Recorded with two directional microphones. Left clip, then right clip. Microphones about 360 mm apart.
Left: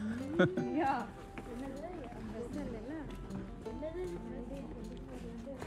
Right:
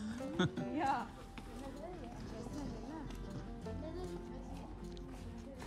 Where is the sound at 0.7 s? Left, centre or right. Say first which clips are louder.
Left 2 dB; right.